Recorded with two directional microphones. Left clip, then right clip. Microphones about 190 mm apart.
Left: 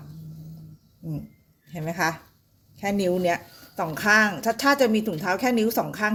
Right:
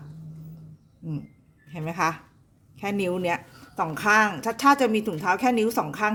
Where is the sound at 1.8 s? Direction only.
10° right (ahead or behind).